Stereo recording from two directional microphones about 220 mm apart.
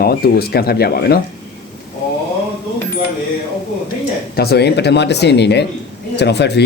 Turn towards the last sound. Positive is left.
turn(degrees=50)  # may be behind; listen again after turning